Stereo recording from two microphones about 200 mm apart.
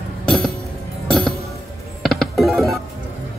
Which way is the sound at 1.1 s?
Centre (ahead or behind).